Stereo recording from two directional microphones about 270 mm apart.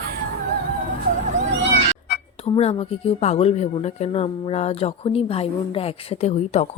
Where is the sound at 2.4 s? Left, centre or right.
Left.